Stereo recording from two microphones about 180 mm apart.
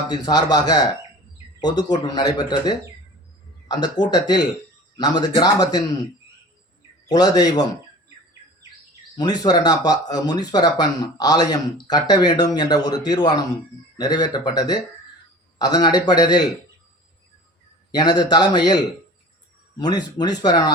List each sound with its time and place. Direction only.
0.1 s speech: 25° left (ahead or behind)
7.1 s speech: 20° left (ahead or behind)
9.1 s speech: 20° left (ahead or behind)
17.9 s speech: 25° left (ahead or behind)